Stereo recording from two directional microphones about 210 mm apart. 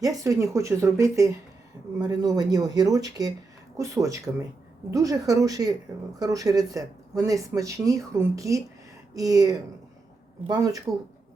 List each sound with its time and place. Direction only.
0.0 s speech: 15° right (ahead or behind)